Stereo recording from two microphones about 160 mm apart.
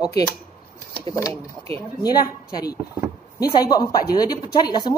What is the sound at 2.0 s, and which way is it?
Speech, 25° left (ahead or behind).